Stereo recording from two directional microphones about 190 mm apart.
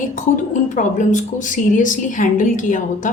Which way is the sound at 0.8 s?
40° left (ahead or behind).